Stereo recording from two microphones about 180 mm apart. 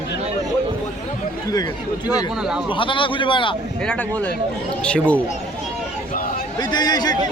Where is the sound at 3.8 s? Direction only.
5° left (ahead or behind).